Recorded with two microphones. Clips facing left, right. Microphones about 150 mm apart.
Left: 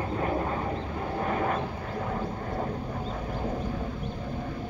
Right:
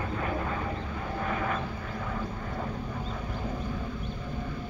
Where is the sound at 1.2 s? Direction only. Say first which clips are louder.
Left 3 dB; 40° left (ahead or behind).